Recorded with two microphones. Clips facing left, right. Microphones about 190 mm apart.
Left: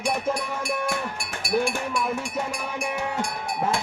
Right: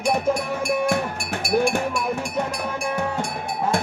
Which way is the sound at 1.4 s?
45° right (ahead or behind).